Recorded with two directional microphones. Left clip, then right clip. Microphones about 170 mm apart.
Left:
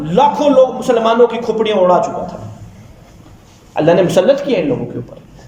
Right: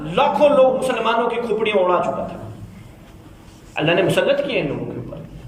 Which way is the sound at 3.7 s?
35° left (ahead or behind).